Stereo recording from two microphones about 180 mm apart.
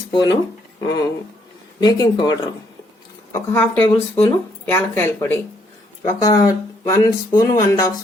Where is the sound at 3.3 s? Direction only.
10° left (ahead or behind).